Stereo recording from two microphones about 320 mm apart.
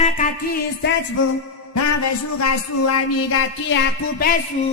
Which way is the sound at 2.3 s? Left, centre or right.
Left.